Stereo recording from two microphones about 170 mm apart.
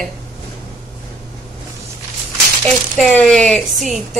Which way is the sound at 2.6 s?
5° left (ahead or behind).